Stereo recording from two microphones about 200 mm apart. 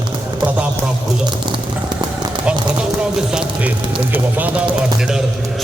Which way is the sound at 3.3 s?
5° right (ahead or behind).